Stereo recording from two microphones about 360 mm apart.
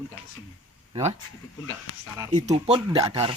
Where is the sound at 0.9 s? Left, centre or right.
Centre.